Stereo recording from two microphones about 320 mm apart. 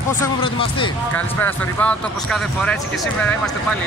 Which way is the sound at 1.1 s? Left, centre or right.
Centre.